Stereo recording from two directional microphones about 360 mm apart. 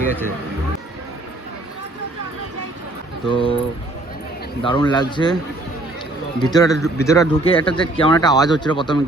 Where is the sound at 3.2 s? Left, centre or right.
Centre.